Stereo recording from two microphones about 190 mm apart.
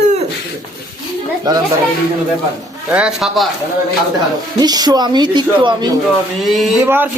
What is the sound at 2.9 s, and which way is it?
Speech, 5° right (ahead or behind).